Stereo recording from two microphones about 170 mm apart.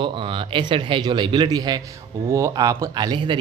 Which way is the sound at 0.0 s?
30° right (ahead or behind).